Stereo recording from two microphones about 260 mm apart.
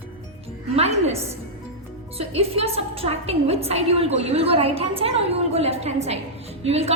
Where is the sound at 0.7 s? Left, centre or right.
Right.